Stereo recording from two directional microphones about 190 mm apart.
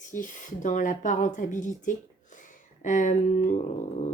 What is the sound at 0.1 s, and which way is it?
Speech, 40° left (ahead or behind).